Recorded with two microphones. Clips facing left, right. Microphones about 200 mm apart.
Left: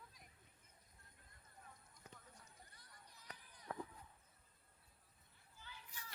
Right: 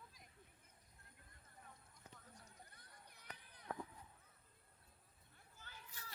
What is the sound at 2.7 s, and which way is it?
Run, 60° right (ahead or behind).